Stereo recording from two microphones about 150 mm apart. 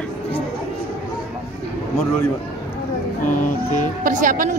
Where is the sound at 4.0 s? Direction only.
65° right (ahead or behind).